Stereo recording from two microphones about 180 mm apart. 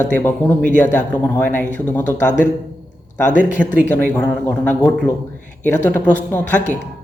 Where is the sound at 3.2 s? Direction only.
45° left (ahead or behind).